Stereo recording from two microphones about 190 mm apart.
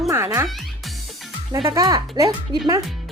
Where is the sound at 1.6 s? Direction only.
15° right (ahead or behind).